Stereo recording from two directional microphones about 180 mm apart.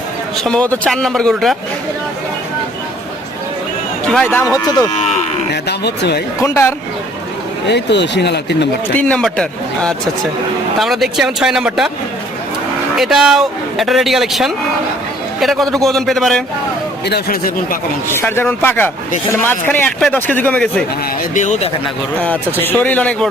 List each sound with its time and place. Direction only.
0.4 s speech: 5° left (ahead or behind)
4.1 s speech: 10° left (ahead or behind)
5.6 s speech: 65° left (ahead or behind)
6.4 s speech: 15° left (ahead or behind)
7.7 s speech: 75° left (ahead or behind)
9.0 s speech: 5° left (ahead or behind)
13.0 s speech: centre (ahead or behind)
17.1 s speech: 60° left (ahead or behind)
18.1 s speech: 15° left (ahead or behind)
21.3 s speech: 40° left (ahead or behind)
22.6 s speech: 10° left (ahead or behind)